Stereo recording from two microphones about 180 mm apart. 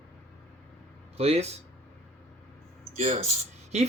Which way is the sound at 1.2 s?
35° right (ahead or behind).